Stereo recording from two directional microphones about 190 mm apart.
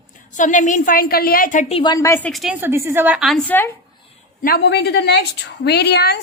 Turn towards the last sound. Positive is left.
turn(degrees=60)  # may be behind; listen again after turning